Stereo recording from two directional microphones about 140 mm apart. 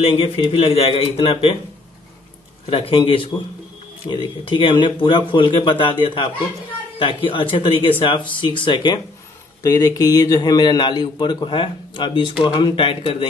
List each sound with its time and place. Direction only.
0.0 s a man's voice: 40° left (ahead or behind)
2.7 s a man's voice: 35° left (ahead or behind)
7.0 s a man's voice: 40° left (ahead or behind)